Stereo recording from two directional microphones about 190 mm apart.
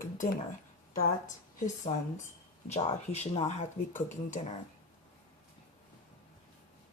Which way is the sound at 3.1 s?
35° left (ahead or behind).